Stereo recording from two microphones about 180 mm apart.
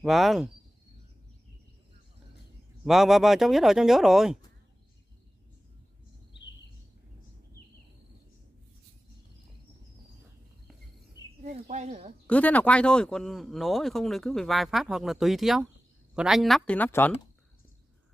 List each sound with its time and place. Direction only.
0.0 s speech: centre (ahead or behind)
2.8 s speech: centre (ahead or behind)
11.4 s speech: 40° right (ahead or behind)
12.3 s speech: 10° left (ahead or behind)